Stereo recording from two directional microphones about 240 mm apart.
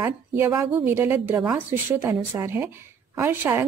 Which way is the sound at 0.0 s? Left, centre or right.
Centre.